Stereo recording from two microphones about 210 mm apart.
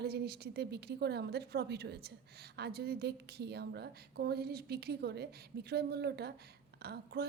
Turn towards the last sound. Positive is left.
turn(degrees=-50)  # may be behind; listen again after turning